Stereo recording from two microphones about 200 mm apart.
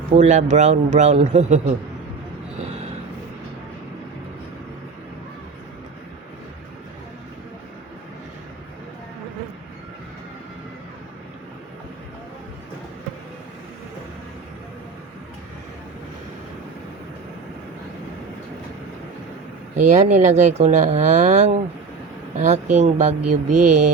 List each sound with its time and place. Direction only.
0.1 s speech: 35° right (ahead or behind)
19.7 s speech: 35° right (ahead or behind)